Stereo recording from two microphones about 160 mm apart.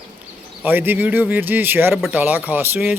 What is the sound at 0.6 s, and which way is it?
Speech, 10° right (ahead or behind).